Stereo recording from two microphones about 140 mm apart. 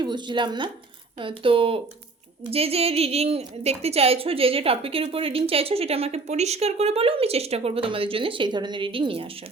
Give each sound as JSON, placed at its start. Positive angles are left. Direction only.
{"t": 0.0, "sound": "a woman's voice", "side_deg": -35}